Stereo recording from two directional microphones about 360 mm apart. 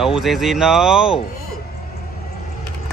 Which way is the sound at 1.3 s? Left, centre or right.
Left.